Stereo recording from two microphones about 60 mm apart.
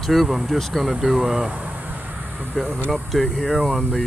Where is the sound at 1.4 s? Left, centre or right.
Right.